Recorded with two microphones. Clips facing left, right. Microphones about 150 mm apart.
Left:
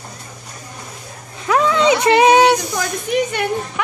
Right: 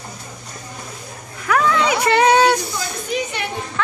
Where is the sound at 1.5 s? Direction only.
20° left (ahead or behind).